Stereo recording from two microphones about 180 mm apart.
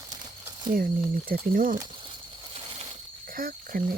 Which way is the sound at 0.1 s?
20° right (ahead or behind).